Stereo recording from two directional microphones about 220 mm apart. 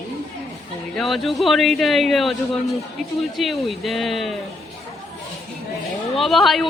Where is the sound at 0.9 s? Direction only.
Centre (ahead or behind).